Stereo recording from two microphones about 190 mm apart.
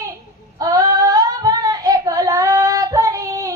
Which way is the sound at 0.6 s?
20° right (ahead or behind).